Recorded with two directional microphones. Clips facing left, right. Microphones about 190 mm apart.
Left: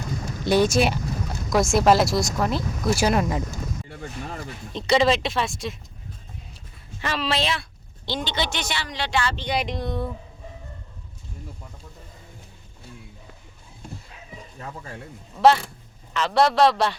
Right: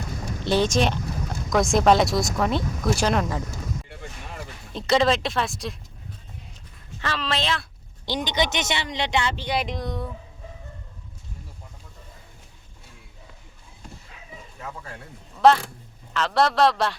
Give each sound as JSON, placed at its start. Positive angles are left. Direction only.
{"t": 0.4, "sound": "speech", "side_deg": 10}
{"t": 4.4, "sound": "speech", "side_deg": 0}
{"t": 7.0, "sound": "speech", "side_deg": 15}
{"t": 8.0, "sound": "speech", "side_deg": -15}
{"t": 9.4, "sound": "speech", "side_deg": 0}
{"t": 15.4, "sound": "speech", "side_deg": 5}